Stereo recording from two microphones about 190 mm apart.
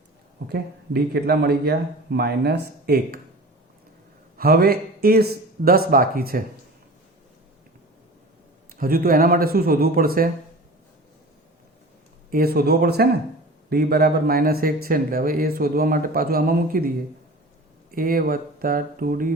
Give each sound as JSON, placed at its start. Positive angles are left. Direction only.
{"t": 0.4, "sound": "speech", "side_deg": -55}
{"t": 4.4, "sound": "a man's voice", "side_deg": -50}
{"t": 8.7, "sound": "speech", "side_deg": -50}
{"t": 12.3, "sound": "speech", "side_deg": -55}
{"t": 17.9, "sound": "speech", "side_deg": -50}